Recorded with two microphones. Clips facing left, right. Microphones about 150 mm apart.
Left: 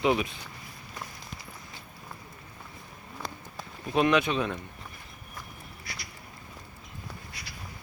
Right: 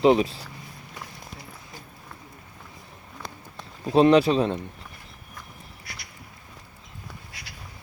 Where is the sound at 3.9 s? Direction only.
30° right (ahead or behind).